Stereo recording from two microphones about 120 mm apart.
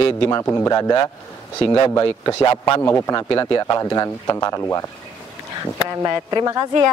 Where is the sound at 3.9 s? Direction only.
25° left (ahead or behind).